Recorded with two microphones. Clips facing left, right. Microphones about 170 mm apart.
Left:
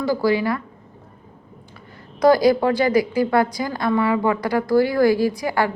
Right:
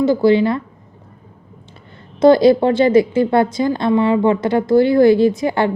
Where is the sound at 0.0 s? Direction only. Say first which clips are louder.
Right 7 dB; 25° right (ahead or behind).